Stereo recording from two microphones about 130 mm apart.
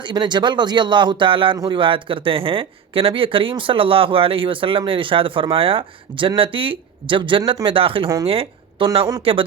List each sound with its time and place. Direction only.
0.0 s a man's voice: 35° right (ahead or behind)